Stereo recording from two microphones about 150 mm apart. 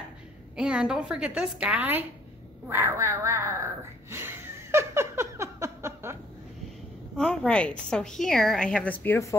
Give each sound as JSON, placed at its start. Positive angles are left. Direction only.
{"t": 0.6, "sound": "a woman's voice", "side_deg": -5}
{"t": 4.1, "sound": "a sound", "side_deg": -15}
{"t": 7.2, "sound": "a woman's voice", "side_deg": 5}